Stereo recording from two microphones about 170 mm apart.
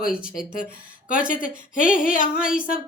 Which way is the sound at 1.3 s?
55° left (ahead or behind).